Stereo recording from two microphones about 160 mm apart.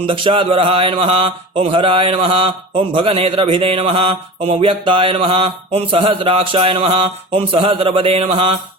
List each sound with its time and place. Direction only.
0.1 s mantra: 35° right (ahead or behind)